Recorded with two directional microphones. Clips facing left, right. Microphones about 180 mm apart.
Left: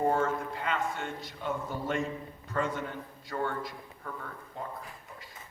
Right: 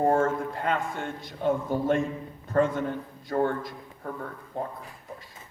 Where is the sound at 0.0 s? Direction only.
50° right (ahead or behind).